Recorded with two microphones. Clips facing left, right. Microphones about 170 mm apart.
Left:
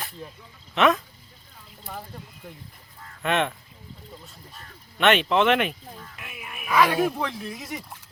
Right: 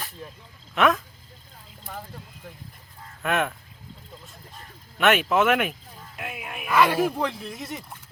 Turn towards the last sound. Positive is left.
turn(degrees=0)  # may be behind; listen again after turning